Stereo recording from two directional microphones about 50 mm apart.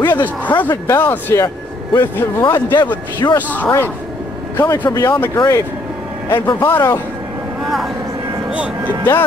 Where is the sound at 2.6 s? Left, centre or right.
Left.